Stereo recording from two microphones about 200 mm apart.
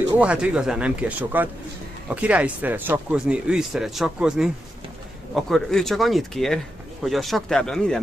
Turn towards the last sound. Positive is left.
turn(degrees=5)  # may be behind; listen again after turning